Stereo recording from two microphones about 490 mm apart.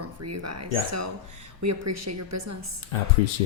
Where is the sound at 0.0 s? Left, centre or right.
Right.